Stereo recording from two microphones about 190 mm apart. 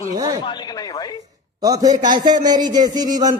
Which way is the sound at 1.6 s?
20° right (ahead or behind).